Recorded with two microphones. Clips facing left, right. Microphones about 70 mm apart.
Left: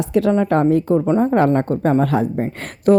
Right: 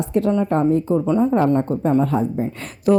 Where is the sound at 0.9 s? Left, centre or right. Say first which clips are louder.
Left 2 dB; left.